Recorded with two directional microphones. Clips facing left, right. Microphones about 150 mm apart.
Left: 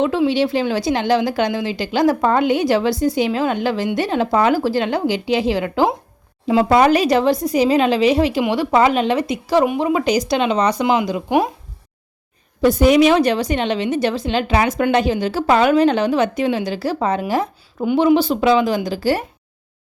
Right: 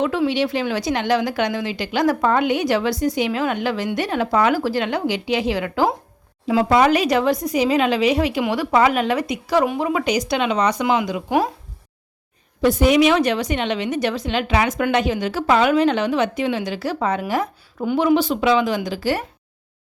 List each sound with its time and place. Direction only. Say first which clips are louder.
0.0 s a woman's voice: left 3 dB; 25° left (ahead or behind)
12.6 s a woman's voice: left 3 dB; 40° left (ahead or behind)